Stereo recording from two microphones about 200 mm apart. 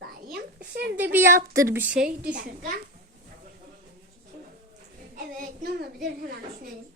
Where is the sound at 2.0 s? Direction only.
45° right (ahead or behind).